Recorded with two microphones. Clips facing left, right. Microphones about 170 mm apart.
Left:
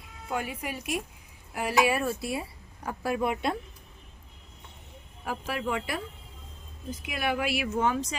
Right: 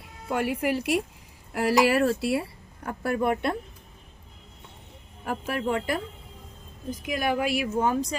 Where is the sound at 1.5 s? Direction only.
90° right.